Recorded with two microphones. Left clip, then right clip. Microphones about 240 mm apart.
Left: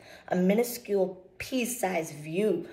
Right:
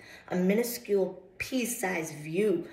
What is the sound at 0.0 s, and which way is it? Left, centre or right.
A woman's voice, centre.